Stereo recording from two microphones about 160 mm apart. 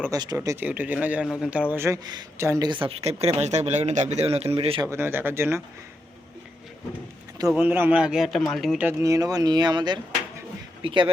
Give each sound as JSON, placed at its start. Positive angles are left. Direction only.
{"t": 0.1, "sound": "a man's voice", "side_deg": -25}
{"t": 2.8, "sound": "a man's voice", "side_deg": -40}
{"t": 4.8, "sound": "a man's voice", "side_deg": -15}
{"t": 7.5, "sound": "a man's voice", "side_deg": -10}
{"t": 8.9, "sound": "speech", "side_deg": -20}